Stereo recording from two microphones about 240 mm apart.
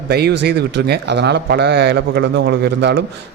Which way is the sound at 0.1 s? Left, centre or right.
Right.